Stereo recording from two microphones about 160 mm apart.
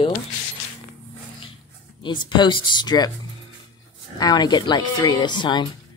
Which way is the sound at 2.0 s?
30° left (ahead or behind).